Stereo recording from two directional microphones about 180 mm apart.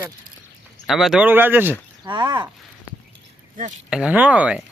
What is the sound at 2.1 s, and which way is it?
Speech, 25° right (ahead or behind).